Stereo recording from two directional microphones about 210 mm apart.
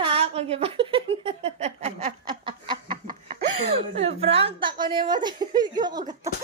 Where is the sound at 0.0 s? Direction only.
30° right (ahead or behind).